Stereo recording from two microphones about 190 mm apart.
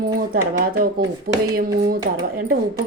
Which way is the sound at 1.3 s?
50° right (ahead or behind).